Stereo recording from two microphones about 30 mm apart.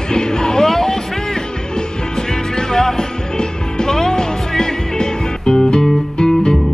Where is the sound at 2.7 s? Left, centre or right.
Centre.